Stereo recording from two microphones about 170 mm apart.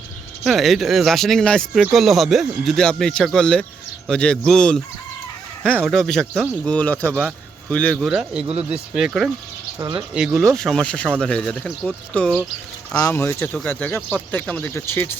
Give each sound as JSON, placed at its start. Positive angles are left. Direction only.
{"t": 0.4, "sound": "speech", "side_deg": 0}
{"t": 5.6, "sound": "speech", "side_deg": -10}
{"t": 5.9, "sound": "speech", "side_deg": 0}
{"t": 8.0, "sound": "speech", "side_deg": -5}
{"t": 9.7, "sound": "speech", "side_deg": -25}
{"t": 10.2, "sound": "speech", "side_deg": -5}